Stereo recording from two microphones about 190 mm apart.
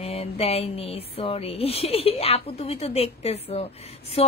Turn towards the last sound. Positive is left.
turn(degrees=30)  # may be behind; listen again after turning